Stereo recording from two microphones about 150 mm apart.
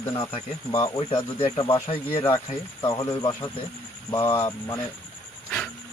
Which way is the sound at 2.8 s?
25° left (ahead or behind).